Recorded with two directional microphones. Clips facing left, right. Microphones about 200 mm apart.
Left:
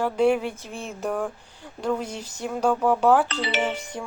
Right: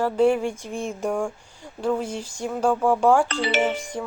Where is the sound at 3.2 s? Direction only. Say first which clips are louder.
Right 4 dB; 45° right (ahead or behind).